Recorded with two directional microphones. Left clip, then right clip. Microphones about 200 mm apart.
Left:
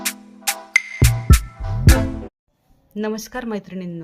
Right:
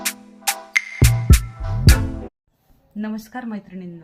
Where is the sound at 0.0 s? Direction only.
Centre (ahead or behind).